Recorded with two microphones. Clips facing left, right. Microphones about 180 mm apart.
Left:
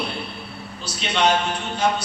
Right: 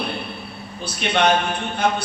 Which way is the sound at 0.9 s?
55° right (ahead or behind).